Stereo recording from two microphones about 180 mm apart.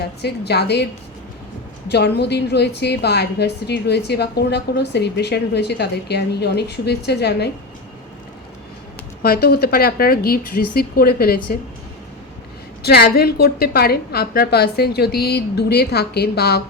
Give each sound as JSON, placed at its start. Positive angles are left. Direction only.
{"t": 0.2, "sound": "a woman's voice", "side_deg": 65}
{"t": 1.9, "sound": "a woman's voice", "side_deg": 70}
{"t": 9.2, "sound": "a woman's voice", "side_deg": 60}
{"t": 12.8, "sound": "a woman's voice", "side_deg": 60}